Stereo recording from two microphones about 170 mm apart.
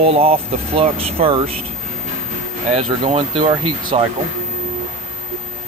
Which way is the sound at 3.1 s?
30° right (ahead or behind).